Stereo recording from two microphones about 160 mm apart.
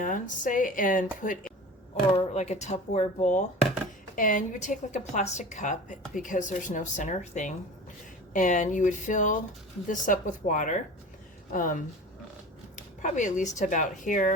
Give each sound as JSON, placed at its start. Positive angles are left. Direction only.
{"t": 0.0, "sound": "speech", "side_deg": 55}
{"t": 2.1, "sound": "a woman's voice", "side_deg": 45}
{"t": 4.1, "sound": "a woman's voice", "side_deg": 55}